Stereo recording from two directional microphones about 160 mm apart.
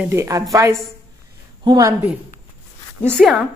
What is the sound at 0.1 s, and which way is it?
A woman's voice, 20° right (ahead or behind).